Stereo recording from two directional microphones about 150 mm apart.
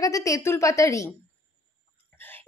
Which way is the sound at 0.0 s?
20° left (ahead or behind).